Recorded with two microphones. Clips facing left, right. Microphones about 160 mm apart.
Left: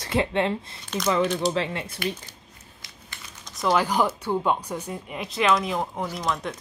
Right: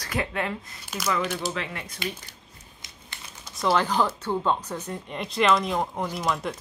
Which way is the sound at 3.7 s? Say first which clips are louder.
Left 1 dB; 10° left (ahead or behind).